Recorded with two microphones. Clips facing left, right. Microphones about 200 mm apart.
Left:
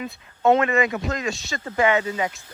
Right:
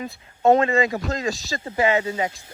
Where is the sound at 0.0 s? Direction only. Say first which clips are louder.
Right 1 dB; 30° right (ahead or behind).